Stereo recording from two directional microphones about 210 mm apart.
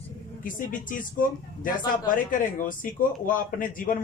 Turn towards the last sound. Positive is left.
turn(degrees=40)  # may be behind; listen again after turning